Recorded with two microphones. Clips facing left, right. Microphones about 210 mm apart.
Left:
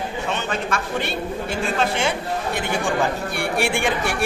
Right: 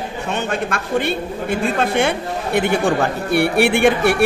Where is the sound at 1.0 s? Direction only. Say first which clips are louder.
Right 4 dB; 55° right (ahead or behind).